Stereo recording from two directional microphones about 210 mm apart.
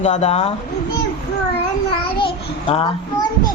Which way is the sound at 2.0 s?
25° left (ahead or behind).